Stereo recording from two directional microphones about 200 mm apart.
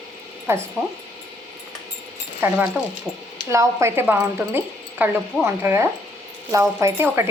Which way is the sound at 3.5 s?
15° right (ahead or behind).